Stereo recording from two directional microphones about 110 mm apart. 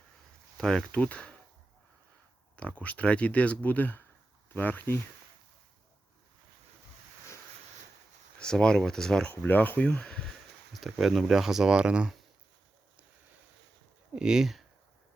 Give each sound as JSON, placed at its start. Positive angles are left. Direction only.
{"t": 0.5, "sound": "speech", "side_deg": 5}
{"t": 2.6, "sound": "speech", "side_deg": 10}
{"t": 8.4, "sound": "speech", "side_deg": 5}
{"t": 9.3, "sound": "speech", "side_deg": 15}
{"t": 10.7, "sound": "a sound", "side_deg": 0}
{"t": 11.0, "sound": "speech", "side_deg": 0}
{"t": 14.2, "sound": "speech", "side_deg": -5}